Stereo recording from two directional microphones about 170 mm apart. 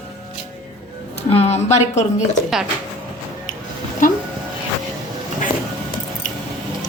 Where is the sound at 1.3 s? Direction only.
40° left (ahead or behind).